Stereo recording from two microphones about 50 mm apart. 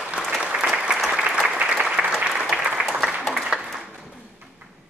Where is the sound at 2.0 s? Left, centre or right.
Right.